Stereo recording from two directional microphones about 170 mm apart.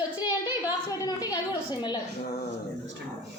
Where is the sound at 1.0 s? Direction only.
20° left (ahead or behind).